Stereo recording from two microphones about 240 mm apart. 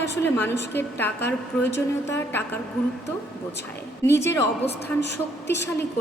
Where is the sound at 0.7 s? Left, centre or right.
Centre.